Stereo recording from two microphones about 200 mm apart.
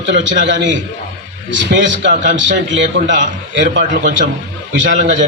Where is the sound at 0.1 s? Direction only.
65° right (ahead or behind).